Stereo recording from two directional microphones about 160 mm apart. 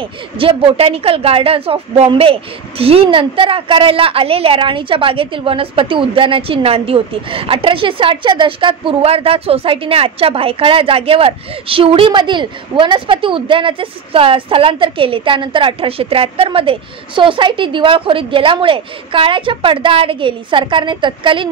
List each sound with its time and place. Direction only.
0.4 s a woman's voice: 35° right (ahead or behind)